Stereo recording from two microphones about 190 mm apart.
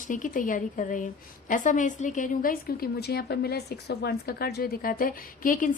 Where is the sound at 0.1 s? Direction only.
45° left (ahead or behind).